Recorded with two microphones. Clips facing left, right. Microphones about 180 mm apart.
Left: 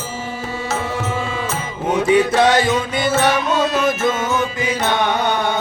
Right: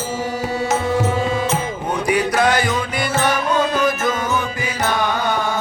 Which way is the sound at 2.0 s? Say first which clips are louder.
Left 4 dB; 25° left (ahead or behind).